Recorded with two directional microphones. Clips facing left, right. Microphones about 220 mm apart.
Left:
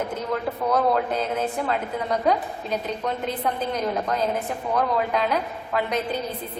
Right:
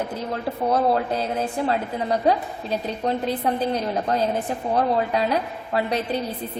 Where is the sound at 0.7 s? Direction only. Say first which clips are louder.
Right 1 dB; 35° right (ahead or behind).